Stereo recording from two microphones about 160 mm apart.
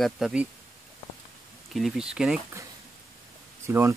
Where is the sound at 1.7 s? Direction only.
Centre (ahead or behind).